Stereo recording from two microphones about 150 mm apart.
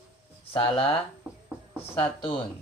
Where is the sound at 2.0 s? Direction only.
35° left (ahead or behind).